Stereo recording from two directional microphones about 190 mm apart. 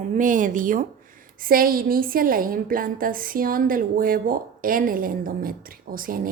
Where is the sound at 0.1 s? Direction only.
45° right (ahead or behind).